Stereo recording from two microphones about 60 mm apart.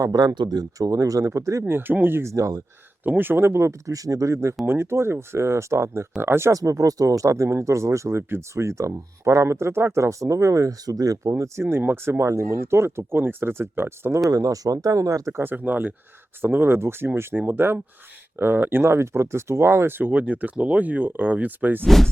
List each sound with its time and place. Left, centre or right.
0.0 s speech: right
1.6 s speech: right
2.2 s speech: right
3.0 s speech: right
4.6 s speech: right
6.5 s speech: right
11.2 s speech: right
11.8 s speech: right
12.2 s speech: right
14.3 s speech: right
15.3 s speech: right
15.5 s speech: right
21.8 s speech: centre